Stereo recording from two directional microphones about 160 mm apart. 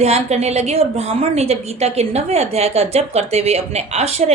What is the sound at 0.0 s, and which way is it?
A woman's voice, 40° right (ahead or behind).